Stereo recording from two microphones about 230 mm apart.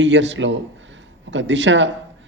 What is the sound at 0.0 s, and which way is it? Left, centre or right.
A man's voice, right.